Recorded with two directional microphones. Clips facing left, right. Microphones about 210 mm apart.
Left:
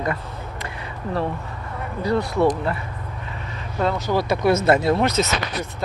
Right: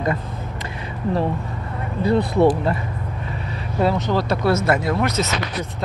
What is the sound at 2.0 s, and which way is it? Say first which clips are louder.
Speech: right 3 dB; 35° right (ahead or behind).